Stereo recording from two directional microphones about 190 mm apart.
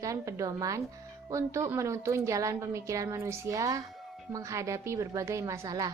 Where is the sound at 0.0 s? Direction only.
15° right (ahead or behind).